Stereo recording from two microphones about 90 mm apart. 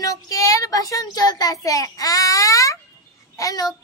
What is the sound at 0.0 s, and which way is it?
Child singing, 40° left (ahead or behind).